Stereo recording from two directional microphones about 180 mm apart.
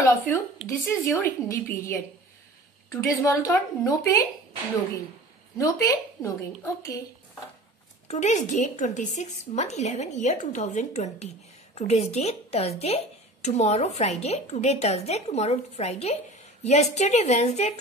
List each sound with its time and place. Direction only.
0.3 s a woman's voice: 10° left (ahead or behind)
5.6 s a woman's voice: 20° left (ahead or behind)
8.1 s a woman's voice: 40° left (ahead or behind)